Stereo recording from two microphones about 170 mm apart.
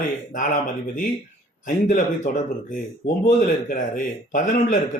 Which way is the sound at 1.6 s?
45° left (ahead or behind).